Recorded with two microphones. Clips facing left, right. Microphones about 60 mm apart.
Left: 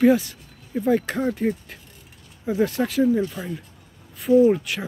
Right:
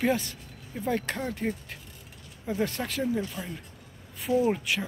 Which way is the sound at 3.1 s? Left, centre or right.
Centre.